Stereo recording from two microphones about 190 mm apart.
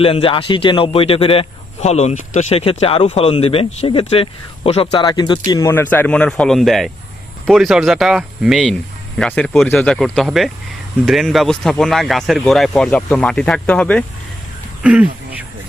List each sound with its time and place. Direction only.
0.0 s a man's voice: 30° left (ahead or behind); by 14.0 s 5° left (ahead or behind)
14.8 s speech: 5° right (ahead or behind)